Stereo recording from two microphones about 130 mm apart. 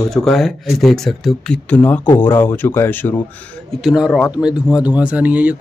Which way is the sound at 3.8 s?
5° right (ahead or behind).